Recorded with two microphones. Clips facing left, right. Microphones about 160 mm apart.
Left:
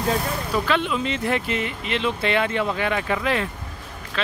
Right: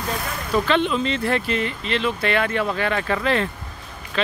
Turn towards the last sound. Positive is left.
turn(degrees=0)  # may be behind; listen again after turning